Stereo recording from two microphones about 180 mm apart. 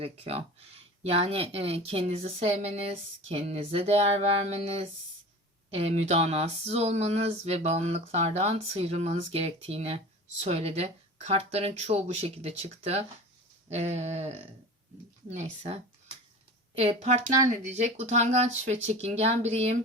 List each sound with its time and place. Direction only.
0.0 s speech: 35° right (ahead or behind)